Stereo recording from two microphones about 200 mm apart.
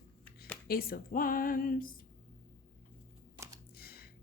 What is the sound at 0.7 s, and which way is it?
A woman's voice, 50° left (ahead or behind).